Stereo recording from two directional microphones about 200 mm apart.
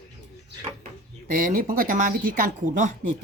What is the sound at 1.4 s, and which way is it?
Speech, 45° right (ahead or behind).